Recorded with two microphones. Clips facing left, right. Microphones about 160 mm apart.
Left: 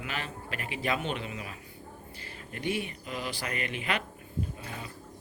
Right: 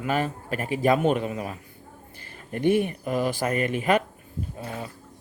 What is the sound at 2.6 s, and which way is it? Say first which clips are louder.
Speech: right 11 dB; 50° right (ahead or behind).